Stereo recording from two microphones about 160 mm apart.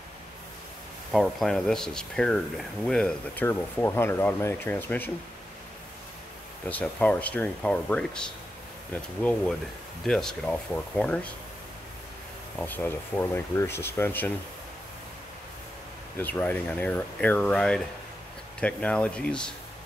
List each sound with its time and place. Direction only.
1.1 s speech: centre (ahead or behind)
6.7 s speech: 10° left (ahead or behind)
12.5 s speech: 10° left (ahead or behind)
16.2 s speech: 10° left (ahead or behind)